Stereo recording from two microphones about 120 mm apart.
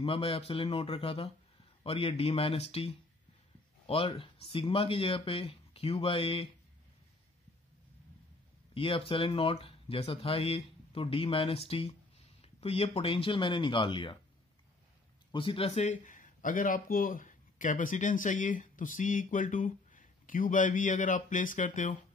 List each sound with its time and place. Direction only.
0.0 s speech: 50° left (ahead or behind)
8.7 s speech: 50° left (ahead or behind)
15.3 s a man's voice: 50° left (ahead or behind); by 21.9 s 90° left